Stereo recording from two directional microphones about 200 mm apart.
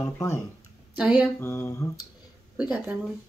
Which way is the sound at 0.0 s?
15° left (ahead or behind).